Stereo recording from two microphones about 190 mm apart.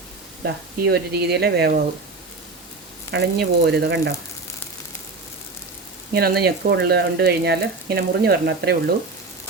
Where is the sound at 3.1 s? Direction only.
60° right (ahead or behind).